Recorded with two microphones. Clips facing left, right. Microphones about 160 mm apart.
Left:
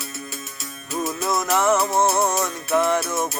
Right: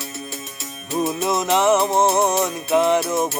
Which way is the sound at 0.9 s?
15° right (ahead or behind).